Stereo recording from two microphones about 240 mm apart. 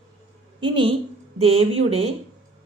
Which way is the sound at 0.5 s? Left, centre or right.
Centre.